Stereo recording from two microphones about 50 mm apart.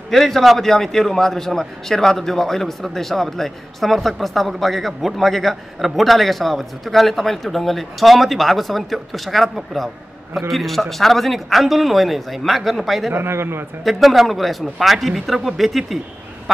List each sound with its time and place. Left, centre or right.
0.1 s a man's voice: centre
13.1 s a man's voice: right
13.8 s a man's voice: centre